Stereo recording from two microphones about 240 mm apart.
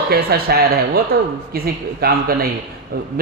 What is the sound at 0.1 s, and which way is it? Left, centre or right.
A man's voice, right.